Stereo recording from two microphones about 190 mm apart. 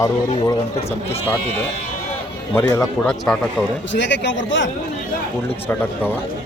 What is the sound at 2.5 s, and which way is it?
Speech, 15° left (ahead or behind).